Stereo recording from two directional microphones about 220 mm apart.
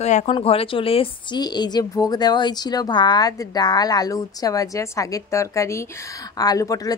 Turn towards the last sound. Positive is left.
turn(degrees=15)  # may be behind; listen again after turning